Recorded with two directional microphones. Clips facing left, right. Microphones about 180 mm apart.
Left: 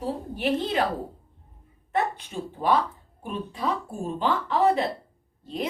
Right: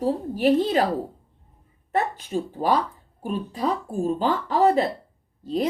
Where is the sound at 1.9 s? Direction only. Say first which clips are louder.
Right 3 dB; 40° right (ahead or behind).